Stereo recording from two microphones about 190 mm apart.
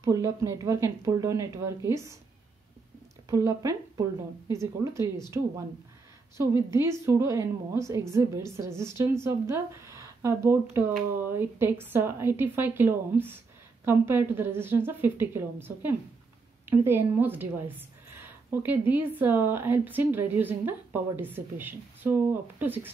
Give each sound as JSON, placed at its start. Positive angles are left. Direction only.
{"t": 0.0, "sound": "a woman's voice", "side_deg": -15}
{"t": 3.3, "sound": "a woman's voice", "side_deg": -15}
{"t": 6.3, "sound": "a woman's voice", "side_deg": -15}